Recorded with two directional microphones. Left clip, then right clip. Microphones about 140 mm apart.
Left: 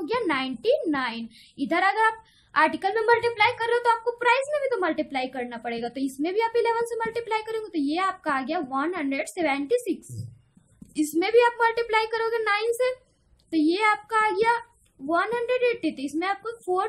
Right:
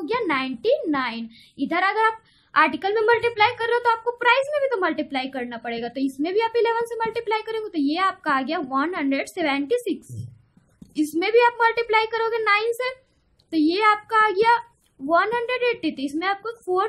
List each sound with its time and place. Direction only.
0.0 s a child's voice: 20° right (ahead or behind)
11.0 s a child's voice: 25° right (ahead or behind)